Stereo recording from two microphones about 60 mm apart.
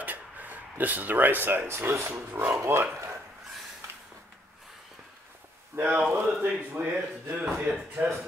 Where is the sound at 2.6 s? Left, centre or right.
Right.